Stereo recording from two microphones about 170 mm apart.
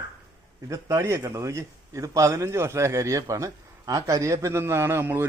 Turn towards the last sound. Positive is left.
turn(degrees=-15)  # may be behind; listen again after turning